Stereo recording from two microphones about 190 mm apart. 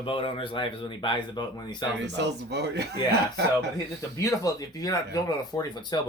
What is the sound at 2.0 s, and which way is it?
Speech, 65° right (ahead or behind).